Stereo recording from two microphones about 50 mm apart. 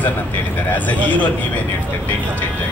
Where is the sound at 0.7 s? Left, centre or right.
Left.